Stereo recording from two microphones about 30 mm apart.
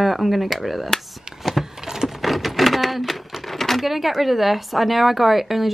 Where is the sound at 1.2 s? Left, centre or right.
Centre.